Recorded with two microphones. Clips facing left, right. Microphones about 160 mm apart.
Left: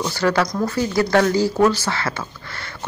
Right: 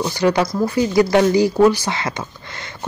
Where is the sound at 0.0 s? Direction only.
15° right (ahead or behind).